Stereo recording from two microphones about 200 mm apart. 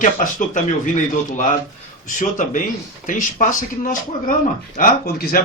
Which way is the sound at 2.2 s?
40° left (ahead or behind).